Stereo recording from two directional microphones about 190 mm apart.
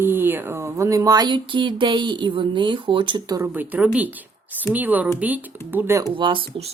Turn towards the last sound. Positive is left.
turn(degrees=-25)  # may be behind; listen again after turning